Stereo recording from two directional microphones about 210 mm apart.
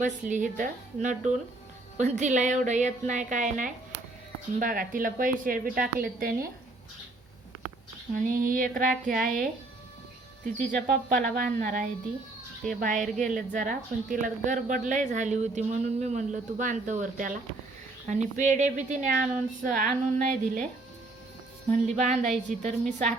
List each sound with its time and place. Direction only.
0.0 s a woman's voice: 35° right (ahead or behind)
8.1 s a woman's voice: 40° right (ahead or behind)
10.7 s a woman's voice: 40° right (ahead or behind)
21.7 s a woman's voice: 35° right (ahead or behind)